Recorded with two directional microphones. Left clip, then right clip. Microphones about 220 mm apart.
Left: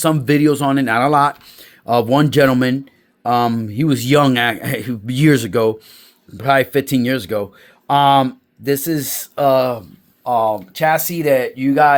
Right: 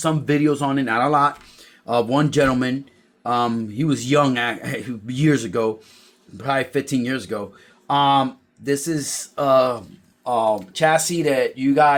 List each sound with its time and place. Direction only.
0.0 s a man's voice: 45° left (ahead or behind)